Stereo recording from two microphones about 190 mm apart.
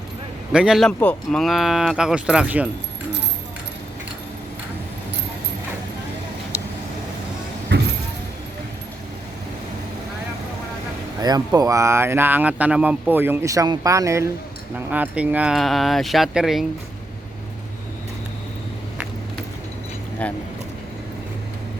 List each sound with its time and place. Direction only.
0.5 s speech: 5° right (ahead or behind)
7.7 s vehicle: 70° right (ahead or behind)
11.2 s speech: 20° right (ahead or behind); by 16.6 s centre (ahead or behind)
20.2 s speech: 5° left (ahead or behind)